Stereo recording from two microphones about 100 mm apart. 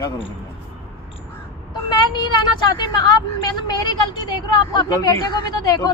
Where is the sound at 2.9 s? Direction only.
40° left (ahead or behind).